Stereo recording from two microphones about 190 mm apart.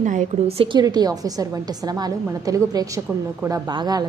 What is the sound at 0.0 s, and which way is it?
A woman's voice, 40° right (ahead or behind).